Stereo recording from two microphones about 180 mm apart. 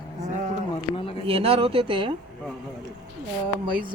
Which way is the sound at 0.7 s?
30° left (ahead or behind).